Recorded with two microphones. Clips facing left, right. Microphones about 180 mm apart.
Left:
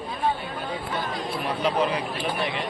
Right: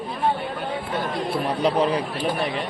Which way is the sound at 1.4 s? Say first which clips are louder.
Right 3 dB; 35° right (ahead or behind).